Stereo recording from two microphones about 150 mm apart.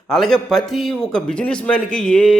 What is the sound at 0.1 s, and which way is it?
A man's voice, centre (ahead or behind).